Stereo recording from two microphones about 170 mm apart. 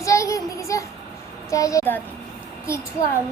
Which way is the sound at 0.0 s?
20° left (ahead or behind).